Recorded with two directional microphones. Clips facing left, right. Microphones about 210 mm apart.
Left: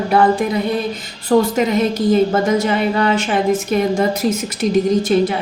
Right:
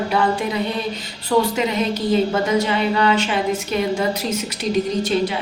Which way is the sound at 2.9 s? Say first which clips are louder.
Left 2 dB; 45° left (ahead or behind).